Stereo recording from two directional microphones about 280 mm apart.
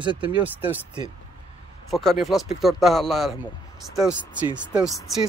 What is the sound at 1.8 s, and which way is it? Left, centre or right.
Speech, centre.